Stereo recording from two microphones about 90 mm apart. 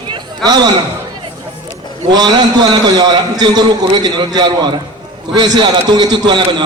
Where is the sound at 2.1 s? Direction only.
50° right (ahead or behind).